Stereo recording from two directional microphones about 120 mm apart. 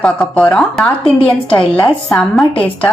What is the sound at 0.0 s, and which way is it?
A woman's voice, 5° left (ahead or behind).